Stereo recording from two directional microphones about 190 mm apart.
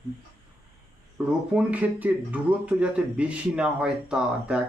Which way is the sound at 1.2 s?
5° right (ahead or behind).